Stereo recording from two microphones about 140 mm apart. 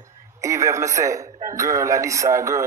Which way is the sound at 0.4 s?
20° right (ahead or behind).